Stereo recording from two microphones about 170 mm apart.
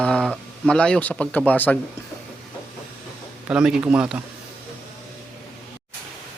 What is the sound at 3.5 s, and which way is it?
Speech, 5° right (ahead or behind).